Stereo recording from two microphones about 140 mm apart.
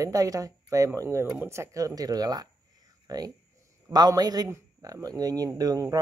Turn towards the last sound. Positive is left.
turn(degrees=-25)  # may be behind; listen again after turning